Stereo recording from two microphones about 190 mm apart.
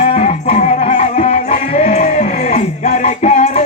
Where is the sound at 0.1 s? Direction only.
35° left (ahead or behind).